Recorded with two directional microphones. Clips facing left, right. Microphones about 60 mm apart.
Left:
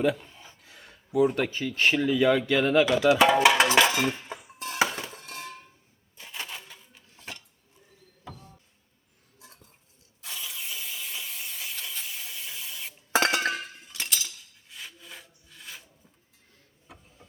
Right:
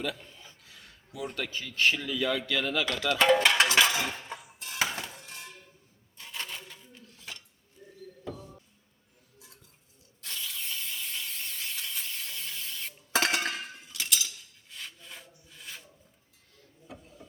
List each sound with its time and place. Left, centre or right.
0.0 s a sound: left
1.4 s speech: left
2.8 s cutlery: centre
4.3 s a sound: centre
4.8 s music: centre
5.1 s music: left
6.1 s a sound: centre
10.2 s a sound: centre
13.1 s chink: centre
13.4 s chink: left
14.7 s rub: centre
16.8 s vehicle: centre